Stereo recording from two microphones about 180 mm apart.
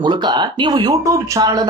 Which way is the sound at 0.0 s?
25° right (ahead or behind).